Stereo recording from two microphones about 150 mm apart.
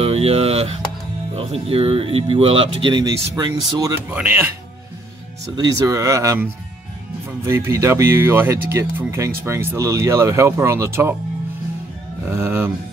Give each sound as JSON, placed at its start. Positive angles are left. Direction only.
{"t": 0.0, "sound": "a sound", "side_deg": -40}
{"t": 1.3, "sound": "speech", "side_deg": -40}
{"t": 4.1, "sound": "speech", "side_deg": -10}
{"t": 5.6, "sound": "speech", "side_deg": -25}
{"t": 12.3, "sound": "speech", "side_deg": -15}